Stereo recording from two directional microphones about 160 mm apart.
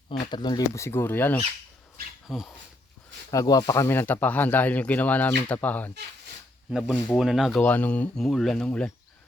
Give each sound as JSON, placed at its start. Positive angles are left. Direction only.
{"t": 0.2, "sound": "speech", "side_deg": 30}
{"t": 2.2, "sound": "speech", "side_deg": -5}
{"t": 3.3, "sound": "speech", "side_deg": 25}
{"t": 3.8, "sound": "speech", "side_deg": 15}
{"t": 6.7, "sound": "speech", "side_deg": 0}
{"t": 7.6, "sound": "speech", "side_deg": 10}